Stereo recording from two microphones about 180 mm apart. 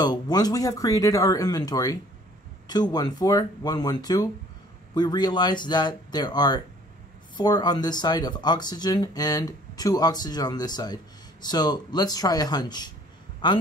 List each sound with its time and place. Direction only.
0.0 s speech: 20° left (ahead or behind)